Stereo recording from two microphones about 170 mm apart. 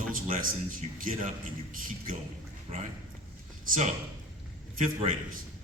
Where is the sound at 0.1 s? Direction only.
55° right (ahead or behind).